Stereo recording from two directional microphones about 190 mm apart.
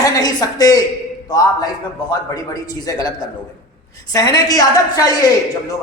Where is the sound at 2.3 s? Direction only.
20° left (ahead or behind).